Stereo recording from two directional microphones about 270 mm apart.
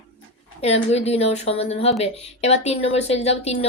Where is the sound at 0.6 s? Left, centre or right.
Left.